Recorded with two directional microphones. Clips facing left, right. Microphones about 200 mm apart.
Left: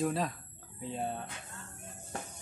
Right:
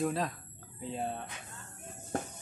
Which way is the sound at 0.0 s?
Centre (ahead or behind).